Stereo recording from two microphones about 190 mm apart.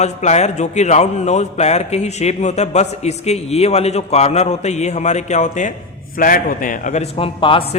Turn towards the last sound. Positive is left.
turn(degrees=30)  # may be behind; listen again after turning